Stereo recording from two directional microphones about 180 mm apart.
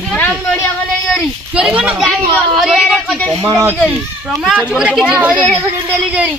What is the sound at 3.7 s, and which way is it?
Speech, 5° left (ahead or behind).